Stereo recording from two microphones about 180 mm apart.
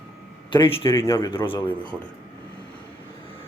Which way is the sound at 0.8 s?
15° left (ahead or behind).